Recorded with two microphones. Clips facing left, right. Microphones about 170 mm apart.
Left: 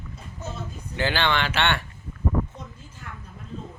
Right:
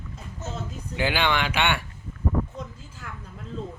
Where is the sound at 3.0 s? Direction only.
90° right.